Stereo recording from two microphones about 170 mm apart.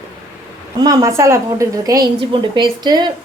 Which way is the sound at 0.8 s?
20° right (ahead or behind).